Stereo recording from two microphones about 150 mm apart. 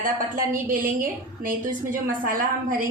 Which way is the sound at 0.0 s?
70° right (ahead or behind).